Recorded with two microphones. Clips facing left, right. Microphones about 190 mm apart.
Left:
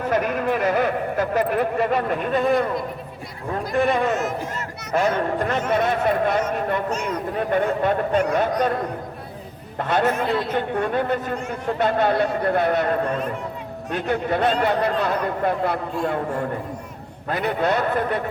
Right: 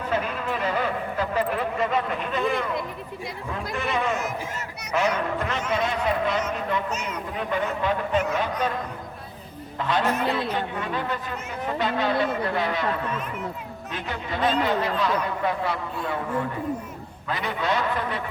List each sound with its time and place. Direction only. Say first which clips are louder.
0.1 s speech: left 6 dB; 50° left (ahead or behind)
3.5 s speech: left 8 dB; 55° left (ahead or behind)
9.7 s speech: left 3 dB; 55° left (ahead or behind); by 13.3 s 40° left (ahead or behind)
13.9 s speech: left 9 dB; 55° left (ahead or behind)